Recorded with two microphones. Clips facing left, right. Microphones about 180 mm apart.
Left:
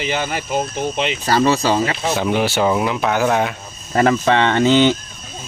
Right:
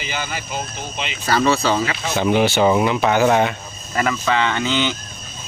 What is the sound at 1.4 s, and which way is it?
Speech, 15° left (ahead or behind).